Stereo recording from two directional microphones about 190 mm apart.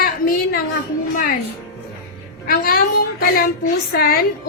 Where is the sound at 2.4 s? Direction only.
50° left (ahead or behind).